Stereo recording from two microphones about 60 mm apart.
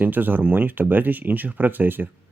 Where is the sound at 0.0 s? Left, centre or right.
Right.